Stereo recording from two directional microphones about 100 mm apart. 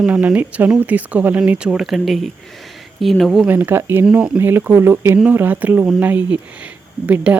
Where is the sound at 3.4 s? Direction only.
20° right (ahead or behind).